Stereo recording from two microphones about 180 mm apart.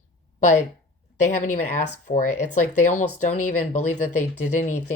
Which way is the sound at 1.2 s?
40° left (ahead or behind).